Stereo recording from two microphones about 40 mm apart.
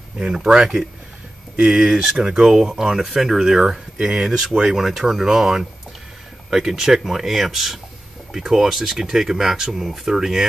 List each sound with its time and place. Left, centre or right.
0.2 s speech: centre